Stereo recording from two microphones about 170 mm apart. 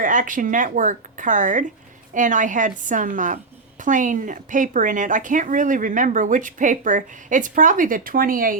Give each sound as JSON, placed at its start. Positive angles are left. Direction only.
{"t": 0.0, "sound": "a woman's voice", "side_deg": -50}